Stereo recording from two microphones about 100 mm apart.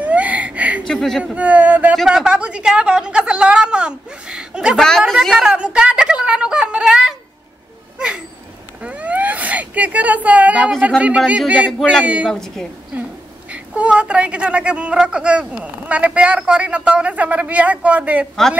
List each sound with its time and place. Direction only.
0.0 s a sound: 15° right (ahead or behind)
0.8 s speech: 5° left (ahead or behind)
1.2 s speech: 15° right (ahead or behind)
4.7 s speech: 5° left (ahead or behind)
5.2 s a sound: 5° right (ahead or behind)
8.8 s a sound: 15° right (ahead or behind)
11.0 s speech: 15° right (ahead or behind)
12.3 s speech: 5° left (ahead or behind)
12.9 s speech: 15° right (ahead or behind)